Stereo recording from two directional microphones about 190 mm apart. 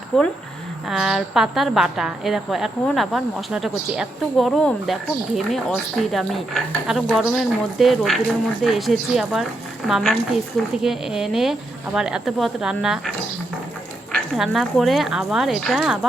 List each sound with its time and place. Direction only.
0.1 s a woman's voice: centre (ahead or behind)